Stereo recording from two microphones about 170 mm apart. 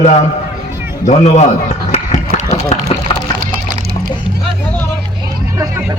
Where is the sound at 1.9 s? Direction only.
35° left (ahead or behind).